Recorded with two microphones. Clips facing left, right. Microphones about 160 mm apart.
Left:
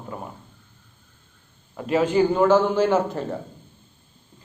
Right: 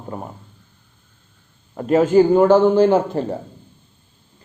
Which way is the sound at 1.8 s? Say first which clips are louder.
Right 6 dB; 40° right (ahead or behind).